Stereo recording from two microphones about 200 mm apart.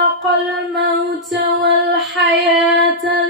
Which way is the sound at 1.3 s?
60° right (ahead or behind).